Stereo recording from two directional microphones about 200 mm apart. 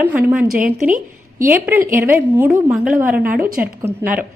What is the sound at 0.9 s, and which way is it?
Speech, 45° right (ahead or behind).